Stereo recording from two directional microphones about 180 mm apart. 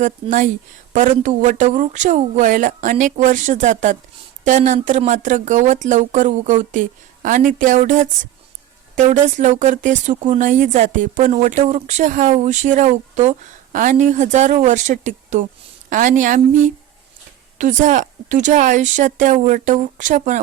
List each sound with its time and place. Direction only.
0.0 s speech: 45° right (ahead or behind)